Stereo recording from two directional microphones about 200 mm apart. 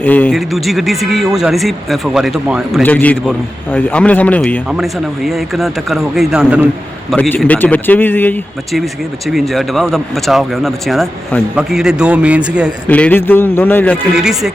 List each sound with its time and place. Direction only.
0.0 s a man's voice: 10° left (ahead or behind)
2.8 s a man's voice: 10° left (ahead or behind)
7.1 s speech: 5° left (ahead or behind)
12.9 s a man's voice: 10° left (ahead or behind)
13.9 s speech: 5° right (ahead or behind)